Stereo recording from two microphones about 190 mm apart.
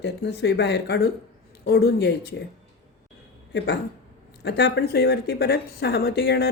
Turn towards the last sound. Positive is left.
turn(degrees=60)  # may be behind; listen again after turning